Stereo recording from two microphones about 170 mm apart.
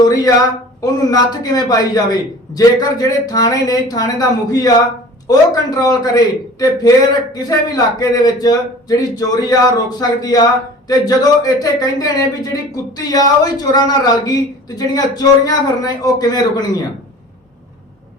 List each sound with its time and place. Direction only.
0.0 s a man's voice: 20° left (ahead or behind)